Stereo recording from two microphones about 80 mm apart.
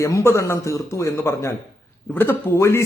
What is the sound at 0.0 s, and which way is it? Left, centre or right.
A man's voice, left.